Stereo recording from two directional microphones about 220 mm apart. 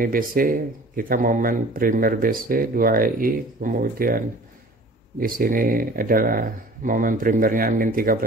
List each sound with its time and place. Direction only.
0.0 s speech: 40° right (ahead or behind)
5.2 s speech: 40° right (ahead or behind)